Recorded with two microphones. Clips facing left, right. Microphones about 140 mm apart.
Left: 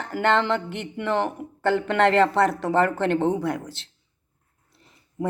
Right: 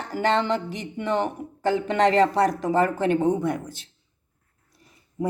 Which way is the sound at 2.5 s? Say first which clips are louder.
Even; 10° right (ahead or behind).